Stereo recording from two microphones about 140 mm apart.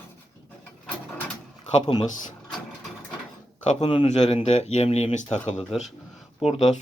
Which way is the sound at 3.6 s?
45° left (ahead or behind).